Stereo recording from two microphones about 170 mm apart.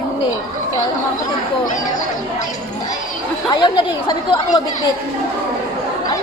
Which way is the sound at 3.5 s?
25° left (ahead or behind).